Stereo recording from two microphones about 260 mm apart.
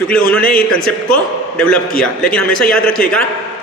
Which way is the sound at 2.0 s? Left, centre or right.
Centre.